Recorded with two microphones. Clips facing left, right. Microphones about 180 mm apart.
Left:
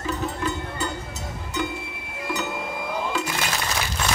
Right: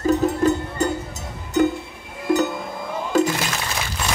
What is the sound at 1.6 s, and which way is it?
Music, 45° right (ahead or behind).